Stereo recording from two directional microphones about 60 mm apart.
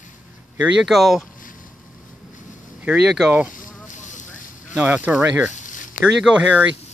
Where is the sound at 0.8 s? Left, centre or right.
Centre.